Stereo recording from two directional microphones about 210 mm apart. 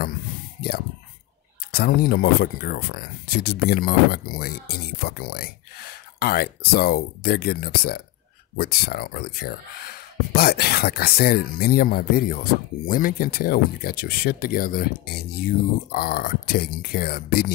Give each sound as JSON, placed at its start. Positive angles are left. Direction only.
{"t": 1.7, "sound": "speech", "side_deg": 45}